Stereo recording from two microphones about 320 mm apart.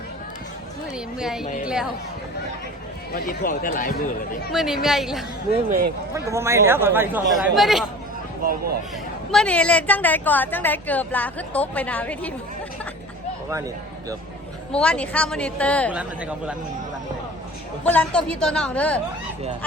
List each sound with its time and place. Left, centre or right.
0.9 s a woman's voice: centre
3.1 s speech: left
4.5 s a woman's voice: centre
8.4 s speech: right
9.3 s a woman's voice: centre
14.7 s a woman's voice: centre
17.8 s a woman's voice: centre